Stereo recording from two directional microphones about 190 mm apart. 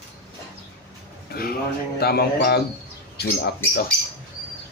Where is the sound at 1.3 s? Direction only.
55° left (ahead or behind).